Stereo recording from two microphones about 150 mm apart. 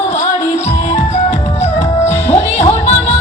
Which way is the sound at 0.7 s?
50° left (ahead or behind).